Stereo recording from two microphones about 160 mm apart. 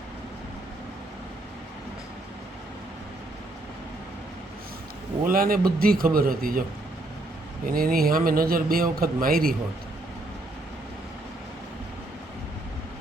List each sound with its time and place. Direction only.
5.2 s a man's voice: 65° right (ahead or behind)